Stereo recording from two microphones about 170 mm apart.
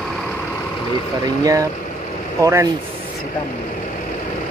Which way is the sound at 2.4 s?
15° right (ahead or behind).